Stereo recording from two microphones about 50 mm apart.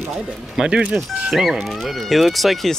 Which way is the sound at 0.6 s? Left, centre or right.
Right.